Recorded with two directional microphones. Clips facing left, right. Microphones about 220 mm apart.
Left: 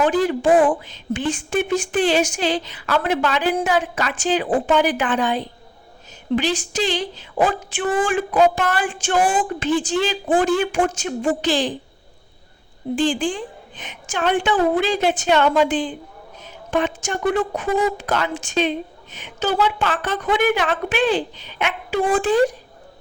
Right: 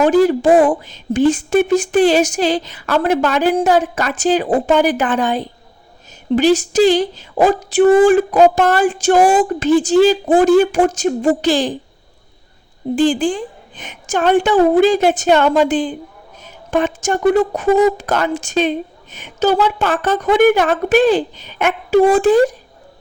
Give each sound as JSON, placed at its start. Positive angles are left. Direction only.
{"t": 0.0, "sound": "a woman's voice", "side_deg": -40}
{"t": 13.0, "sound": "a woman's voice", "side_deg": -40}